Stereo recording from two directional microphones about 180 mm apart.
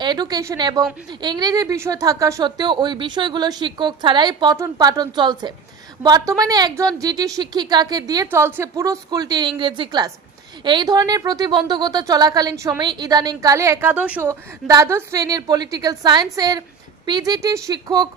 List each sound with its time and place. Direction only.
0.0 s a woman's voice: 25° right (ahead or behind)